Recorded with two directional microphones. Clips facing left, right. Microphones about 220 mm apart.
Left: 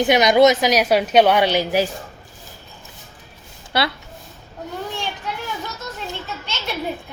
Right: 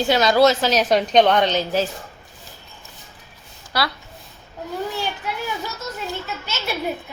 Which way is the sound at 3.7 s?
25° left (ahead or behind).